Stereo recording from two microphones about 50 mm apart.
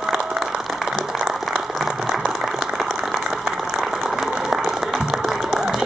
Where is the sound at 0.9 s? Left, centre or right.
Centre.